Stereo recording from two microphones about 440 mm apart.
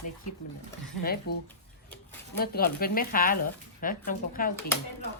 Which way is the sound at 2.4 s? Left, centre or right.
Left.